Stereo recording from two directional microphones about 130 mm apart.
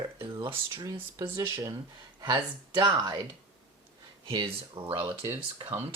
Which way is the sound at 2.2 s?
35° right (ahead or behind).